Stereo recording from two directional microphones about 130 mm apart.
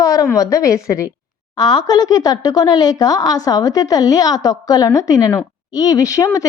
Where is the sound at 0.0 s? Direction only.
25° left (ahead or behind).